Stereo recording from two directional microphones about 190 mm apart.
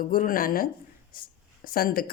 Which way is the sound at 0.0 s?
45° left (ahead or behind).